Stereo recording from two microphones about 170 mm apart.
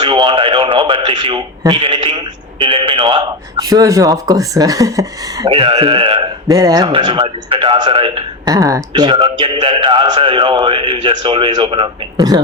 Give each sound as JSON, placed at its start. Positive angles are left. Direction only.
{"t": 0.0, "sound": "radio", "side_deg": -30}
{"t": 1.0, "sound": "speech", "side_deg": -30}
{"t": 5.5, "sound": "a man's voice", "side_deg": -30}
{"t": 8.5, "sound": "a man's voice", "side_deg": -20}